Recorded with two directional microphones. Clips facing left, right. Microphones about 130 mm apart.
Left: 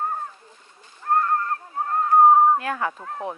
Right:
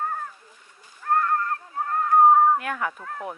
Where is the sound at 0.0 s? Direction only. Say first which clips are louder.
Left 2 dB; 25° left (ahead or behind).